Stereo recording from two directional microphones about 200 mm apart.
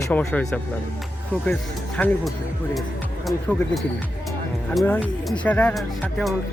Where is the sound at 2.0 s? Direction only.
Centre (ahead or behind).